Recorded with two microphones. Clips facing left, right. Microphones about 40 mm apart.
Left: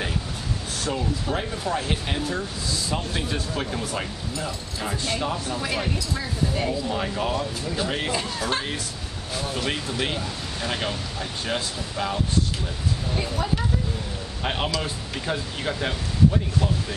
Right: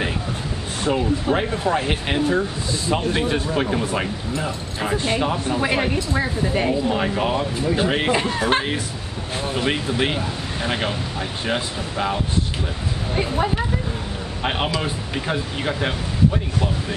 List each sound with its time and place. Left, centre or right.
0.8 s speech: right